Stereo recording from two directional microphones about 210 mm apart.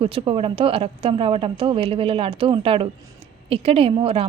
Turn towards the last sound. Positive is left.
turn(degrees=-25)  # may be behind; listen again after turning